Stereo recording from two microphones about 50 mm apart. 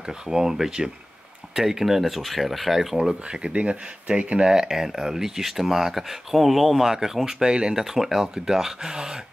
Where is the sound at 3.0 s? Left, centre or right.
Centre.